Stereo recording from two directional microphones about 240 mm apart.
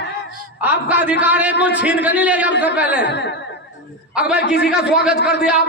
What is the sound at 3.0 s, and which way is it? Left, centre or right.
Speech, left.